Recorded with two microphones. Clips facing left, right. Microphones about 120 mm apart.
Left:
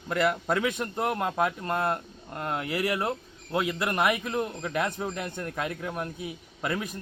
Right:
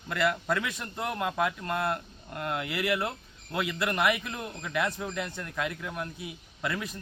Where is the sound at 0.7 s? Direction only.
50° left (ahead or behind).